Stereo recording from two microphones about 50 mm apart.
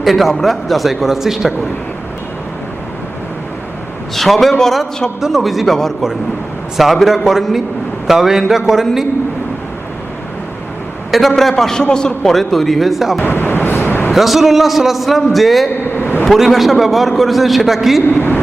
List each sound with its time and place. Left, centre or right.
0.0 s a man's voice: centre
4.1 s a man's voice: centre
11.3 s a man's voice: centre
12.3 s a man's voice: centre
13.2 s vehicle: left
14.1 s a man's voice: centre
16.0 s a sound: left
16.2 s a man's voice: centre
18.0 s a man's voice: left